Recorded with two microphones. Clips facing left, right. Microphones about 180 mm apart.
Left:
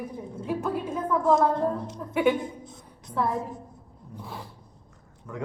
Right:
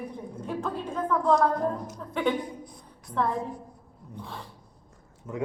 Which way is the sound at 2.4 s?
25° left (ahead or behind).